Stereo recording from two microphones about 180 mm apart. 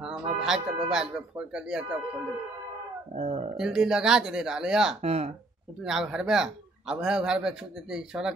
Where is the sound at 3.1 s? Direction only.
35° right (ahead or behind).